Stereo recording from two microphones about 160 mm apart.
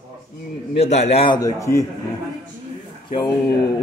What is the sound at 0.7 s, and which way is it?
Speech, 45° left (ahead or behind).